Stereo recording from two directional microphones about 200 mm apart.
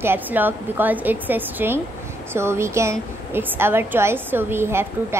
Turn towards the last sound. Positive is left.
turn(degrees=-10)  # may be behind; listen again after turning